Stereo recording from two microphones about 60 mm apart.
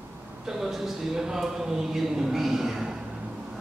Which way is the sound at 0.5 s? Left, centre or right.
Centre.